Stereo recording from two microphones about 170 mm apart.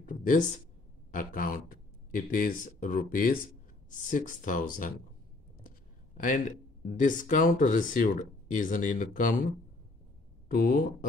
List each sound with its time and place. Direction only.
0.0 s speech: 50° left (ahead or behind)
6.1 s speech: 50° left (ahead or behind)